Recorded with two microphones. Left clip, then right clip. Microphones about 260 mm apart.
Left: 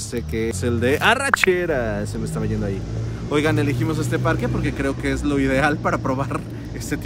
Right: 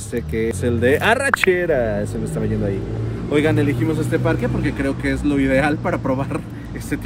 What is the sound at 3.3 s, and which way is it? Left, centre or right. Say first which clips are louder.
Speech: right 2 dB; left.